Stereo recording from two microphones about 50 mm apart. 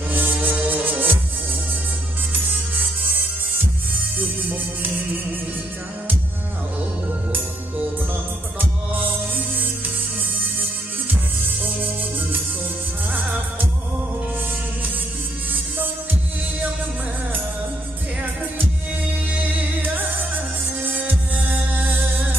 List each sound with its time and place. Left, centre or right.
0.1 s music: right
8.5 s music: right
13.1 s music: right
19.3 s music: right